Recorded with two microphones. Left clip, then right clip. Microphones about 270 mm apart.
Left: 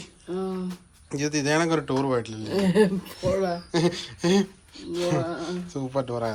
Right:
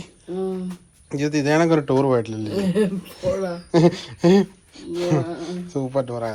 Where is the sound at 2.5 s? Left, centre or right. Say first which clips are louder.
Left 2 dB; left.